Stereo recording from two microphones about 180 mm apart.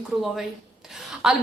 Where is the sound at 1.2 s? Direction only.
5° right (ahead or behind).